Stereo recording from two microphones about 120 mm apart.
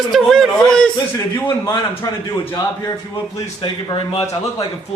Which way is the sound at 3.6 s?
45° left (ahead or behind).